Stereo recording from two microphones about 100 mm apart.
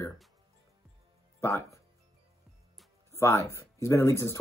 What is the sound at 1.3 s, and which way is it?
Music, 30° left (ahead or behind).